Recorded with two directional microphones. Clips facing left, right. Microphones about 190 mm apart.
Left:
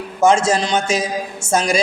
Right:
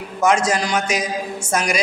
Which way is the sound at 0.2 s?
25° left (ahead or behind).